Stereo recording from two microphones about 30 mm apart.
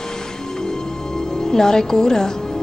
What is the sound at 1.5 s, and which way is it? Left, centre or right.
Speech, centre.